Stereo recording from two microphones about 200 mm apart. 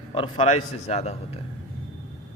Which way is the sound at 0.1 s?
30° left (ahead or behind).